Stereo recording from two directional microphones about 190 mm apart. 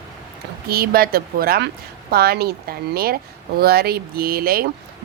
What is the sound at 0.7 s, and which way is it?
A woman's voice, 55° right (ahead or behind).